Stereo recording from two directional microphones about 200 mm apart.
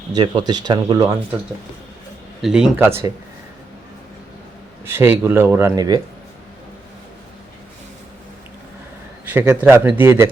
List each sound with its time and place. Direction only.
0.1 s speech: 20° right (ahead or behind)
2.4 s a man's voice: 5° right (ahead or behind)
4.9 s a man's voice: 10° right (ahead or behind)
9.2 s a man's voice: 10° right (ahead or behind)